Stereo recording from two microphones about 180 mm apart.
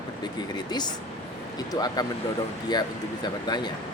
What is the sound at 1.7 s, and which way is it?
Speech, 20° left (ahead or behind).